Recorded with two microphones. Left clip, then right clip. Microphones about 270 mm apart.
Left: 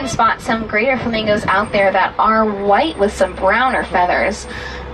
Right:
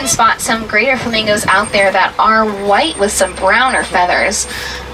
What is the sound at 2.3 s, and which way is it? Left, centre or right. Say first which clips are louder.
Speech: right 2 dB; centre.